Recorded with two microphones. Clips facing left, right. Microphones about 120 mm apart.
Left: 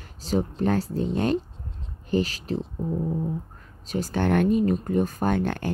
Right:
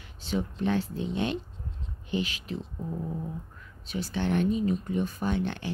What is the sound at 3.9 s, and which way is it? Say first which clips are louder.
Speech: left 5 dB; 45° left (ahead or behind).